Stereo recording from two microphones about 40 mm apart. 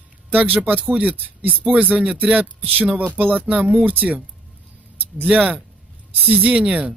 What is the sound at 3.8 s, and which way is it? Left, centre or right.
Speech, right.